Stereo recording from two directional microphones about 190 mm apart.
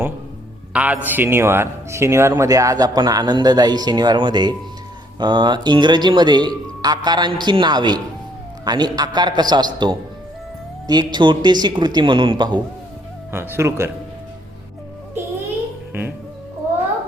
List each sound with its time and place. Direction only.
0.7 s a man's voice: 5° right (ahead or behind); by 12.5 s 25° right (ahead or behind)
13.3 s speech: 10° right (ahead or behind)
15.9 s music: 10° right (ahead or behind)